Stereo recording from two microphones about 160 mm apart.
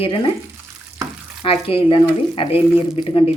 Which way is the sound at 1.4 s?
35° left (ahead or behind).